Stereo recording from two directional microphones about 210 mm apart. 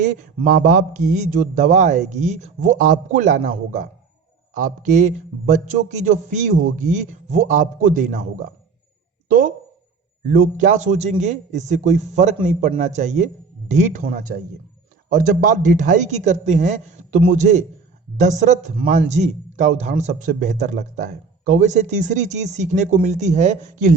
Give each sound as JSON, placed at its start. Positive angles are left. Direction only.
{"t": 0.0, "sound": "speech", "side_deg": -35}
{"t": 4.5, "sound": "speech", "side_deg": -35}
{"t": 10.2, "sound": "speech", "side_deg": -40}
{"t": 15.1, "sound": "speech", "side_deg": -40}